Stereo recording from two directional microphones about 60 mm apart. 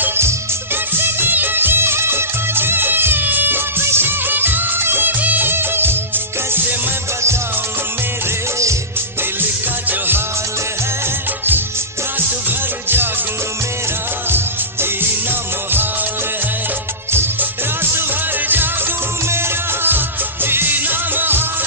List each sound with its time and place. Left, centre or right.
0.9 s music of bollywood: right
9.4 s music: right
12.4 s music: right
14.3 s music: right
17.1 s music of bollywood: right
19.2 s music: right